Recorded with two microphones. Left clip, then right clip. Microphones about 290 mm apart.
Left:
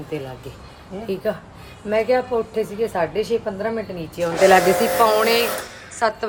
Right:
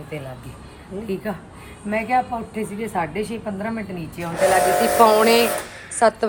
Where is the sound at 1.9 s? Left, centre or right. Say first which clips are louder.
Left 2 dB; centre.